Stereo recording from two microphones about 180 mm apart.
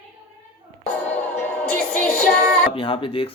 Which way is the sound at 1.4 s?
5° left (ahead or behind).